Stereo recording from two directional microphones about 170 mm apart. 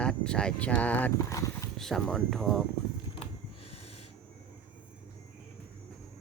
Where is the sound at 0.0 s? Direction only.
5° left (ahead or behind).